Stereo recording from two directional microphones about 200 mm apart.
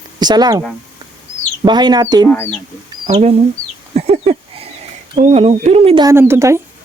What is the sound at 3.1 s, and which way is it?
Speech, 30° right (ahead or behind).